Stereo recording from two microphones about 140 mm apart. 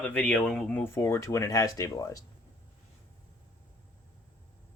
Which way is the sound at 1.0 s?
20° left (ahead or behind).